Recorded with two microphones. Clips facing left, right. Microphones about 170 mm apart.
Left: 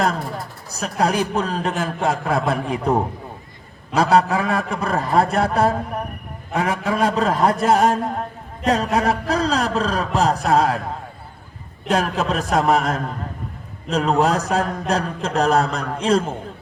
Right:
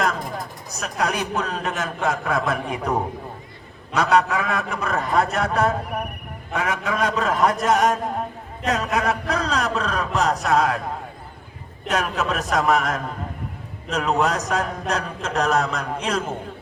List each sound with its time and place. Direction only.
0.7 s a man's voice: 30° left (ahead or behind)
3.9 s a man's voice: 30° left (ahead or behind)
11.9 s a man's voice: 30° left (ahead or behind)